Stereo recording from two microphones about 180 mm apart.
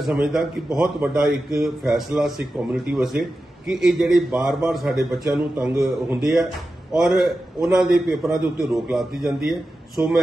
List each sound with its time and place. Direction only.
0.0 s a man's voice: centre (ahead or behind)